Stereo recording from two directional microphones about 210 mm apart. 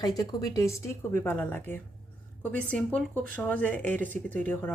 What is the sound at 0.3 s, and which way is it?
Speech, 15° left (ahead or behind).